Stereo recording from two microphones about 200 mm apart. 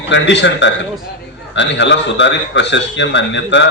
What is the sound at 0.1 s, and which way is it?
Speech, 65° left (ahead or behind).